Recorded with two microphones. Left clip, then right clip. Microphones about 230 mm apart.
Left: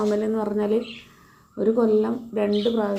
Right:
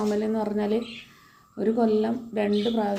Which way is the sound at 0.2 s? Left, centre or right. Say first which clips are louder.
Left 3 dB; centre.